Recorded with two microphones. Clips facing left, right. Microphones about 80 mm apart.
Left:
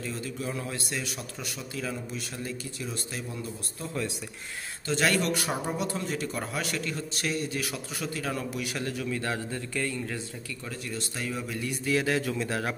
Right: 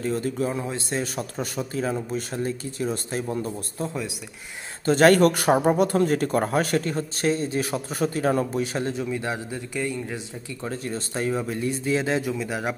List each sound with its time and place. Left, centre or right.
0.0 s speech: right
0.5 s speech: right
10.6 s a man's voice: right; by 12.7 s centre